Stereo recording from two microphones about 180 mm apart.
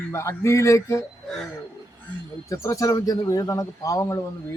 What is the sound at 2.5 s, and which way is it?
A man's voice, 20° left (ahead or behind).